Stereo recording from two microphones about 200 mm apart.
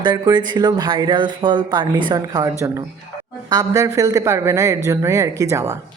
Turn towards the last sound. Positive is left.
turn(degrees=-15)  # may be behind; listen again after turning